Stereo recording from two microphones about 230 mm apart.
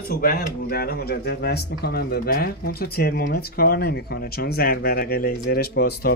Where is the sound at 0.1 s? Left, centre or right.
Left.